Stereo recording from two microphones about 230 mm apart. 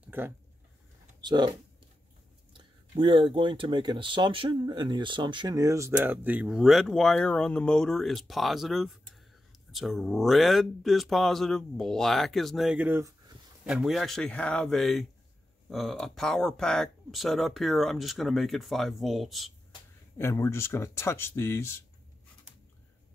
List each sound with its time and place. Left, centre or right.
0.0 s a sound: centre
1.2 s speech: centre
2.5 s speech: right; by 19.5 s centre
20.2 s speech: centre